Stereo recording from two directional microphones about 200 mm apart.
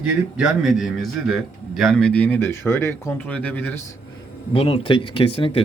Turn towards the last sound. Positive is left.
turn(degrees=25)  # may be behind; listen again after turning